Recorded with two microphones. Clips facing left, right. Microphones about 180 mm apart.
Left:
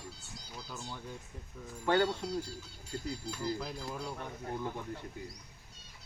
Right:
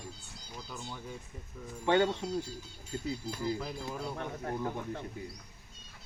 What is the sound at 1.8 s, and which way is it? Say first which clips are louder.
Speech: right 2 dB; 20° right (ahead or behind).